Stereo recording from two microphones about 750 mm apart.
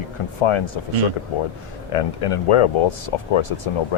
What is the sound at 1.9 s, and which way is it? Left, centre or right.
Speech, left.